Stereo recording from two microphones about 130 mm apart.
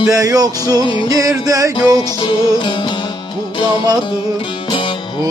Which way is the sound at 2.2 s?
40° left (ahead or behind).